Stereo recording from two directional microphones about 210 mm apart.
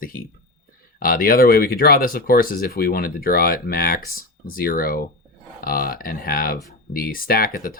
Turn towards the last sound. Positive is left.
turn(degrees=45)  # may be behind; listen again after turning